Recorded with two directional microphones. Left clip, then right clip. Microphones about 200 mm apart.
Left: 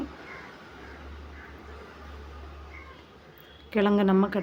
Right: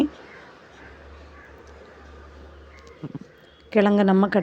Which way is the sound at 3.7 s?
30° right (ahead or behind).